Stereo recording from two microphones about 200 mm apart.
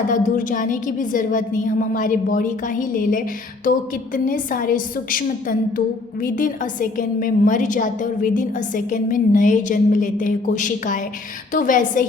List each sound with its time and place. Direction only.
0.1 s a woman's voice: 40° left (ahead or behind)